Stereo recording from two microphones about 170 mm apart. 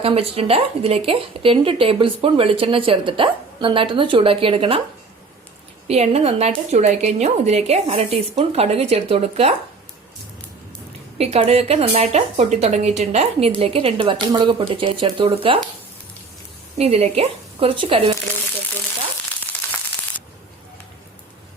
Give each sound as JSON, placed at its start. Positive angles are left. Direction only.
{"t": 0.0, "sound": "speech", "side_deg": -35}
{"t": 5.9, "sound": "speech", "side_deg": -40}
{"t": 11.2, "sound": "speech", "side_deg": -35}
{"t": 16.7, "sound": "speech", "side_deg": -35}
{"t": 19.4, "sound": "crushing", "side_deg": 10}